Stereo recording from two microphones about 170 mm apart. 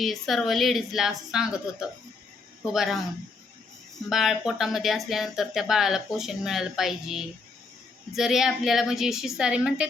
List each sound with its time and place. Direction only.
0.0 s speech: centre (ahead or behind)
4.1 s speech: centre (ahead or behind)